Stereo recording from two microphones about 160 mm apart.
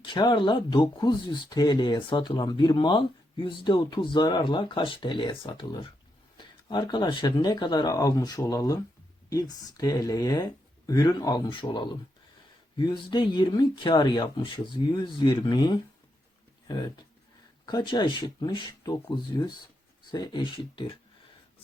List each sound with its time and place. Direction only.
0.0 s speech: 30° left (ahead or behind)